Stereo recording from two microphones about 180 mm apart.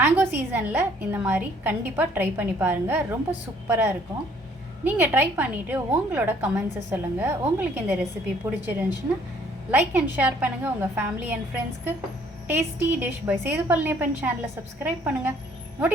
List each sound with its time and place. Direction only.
0.0 s a woman's voice: 10° right (ahead or behind)